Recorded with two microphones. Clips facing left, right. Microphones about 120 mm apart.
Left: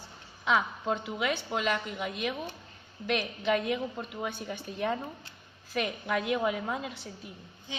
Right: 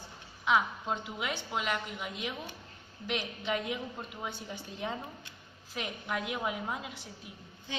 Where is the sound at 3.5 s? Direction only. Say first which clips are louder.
Left 6 dB; 75° left (ahead or behind).